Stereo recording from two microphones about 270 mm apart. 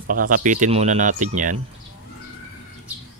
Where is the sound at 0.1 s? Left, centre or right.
Right.